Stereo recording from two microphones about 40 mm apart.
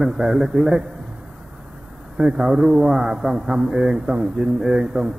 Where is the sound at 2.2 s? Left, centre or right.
Right.